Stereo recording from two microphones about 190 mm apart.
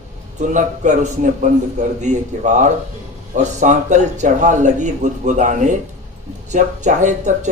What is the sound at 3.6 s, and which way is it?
A man's voice, 40° right (ahead or behind).